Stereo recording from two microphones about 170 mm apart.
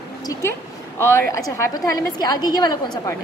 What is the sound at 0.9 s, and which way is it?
A woman's voice, 15° left (ahead or behind).